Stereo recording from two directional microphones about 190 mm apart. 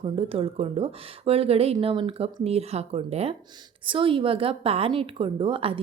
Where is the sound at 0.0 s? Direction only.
30° right (ahead or behind).